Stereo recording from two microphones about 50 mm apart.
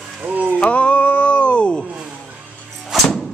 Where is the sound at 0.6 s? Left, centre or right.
Left.